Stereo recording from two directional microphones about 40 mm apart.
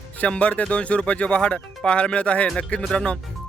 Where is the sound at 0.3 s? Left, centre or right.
Left.